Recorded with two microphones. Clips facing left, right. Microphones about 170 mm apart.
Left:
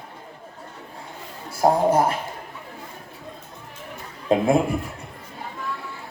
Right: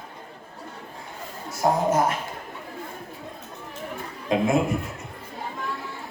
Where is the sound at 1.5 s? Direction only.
30° left (ahead or behind).